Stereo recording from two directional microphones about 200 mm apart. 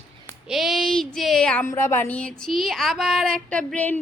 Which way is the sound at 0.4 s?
Centre (ahead or behind).